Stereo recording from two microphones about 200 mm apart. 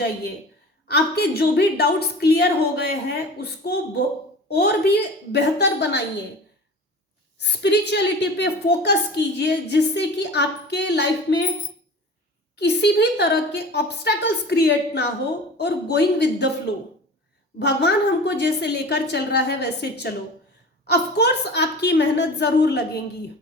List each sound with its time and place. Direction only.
0.9 s a woman's voice: 55° left (ahead or behind)
7.3 s a woman's voice: 60° left (ahead or behind)
12.5 s a woman's voice: 55° left (ahead or behind)
17.6 s a woman's voice: 60° left (ahead or behind)